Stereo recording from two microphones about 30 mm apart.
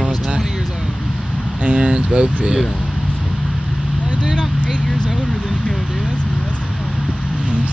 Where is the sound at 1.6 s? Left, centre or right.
Right.